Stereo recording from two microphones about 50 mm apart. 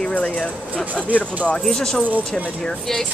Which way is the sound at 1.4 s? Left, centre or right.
Centre.